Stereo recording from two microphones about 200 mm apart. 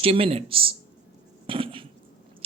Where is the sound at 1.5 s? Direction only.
25° right (ahead or behind).